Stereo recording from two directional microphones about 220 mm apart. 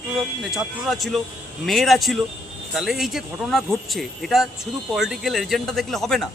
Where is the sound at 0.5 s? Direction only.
Centre (ahead or behind).